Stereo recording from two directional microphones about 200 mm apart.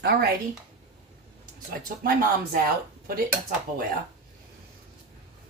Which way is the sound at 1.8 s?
45° right (ahead or behind).